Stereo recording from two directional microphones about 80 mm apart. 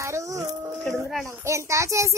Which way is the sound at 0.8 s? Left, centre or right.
Centre.